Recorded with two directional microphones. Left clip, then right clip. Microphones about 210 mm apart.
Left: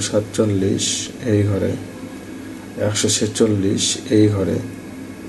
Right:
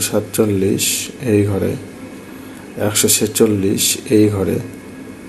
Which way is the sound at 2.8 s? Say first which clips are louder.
Right 3 dB; 30° right (ahead or behind).